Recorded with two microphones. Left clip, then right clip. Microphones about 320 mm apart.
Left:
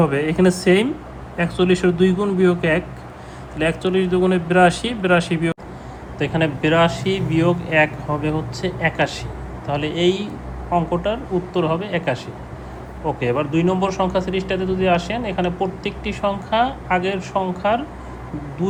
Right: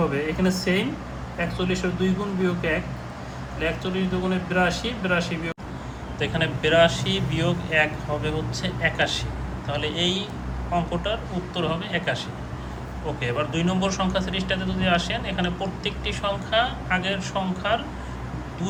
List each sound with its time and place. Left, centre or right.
0.1 s a man's voice: left
6.1 s a man's voice: centre
11.5 s a man's voice: centre